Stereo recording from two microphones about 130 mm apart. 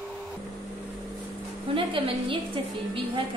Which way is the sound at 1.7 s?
40° right (ahead or behind).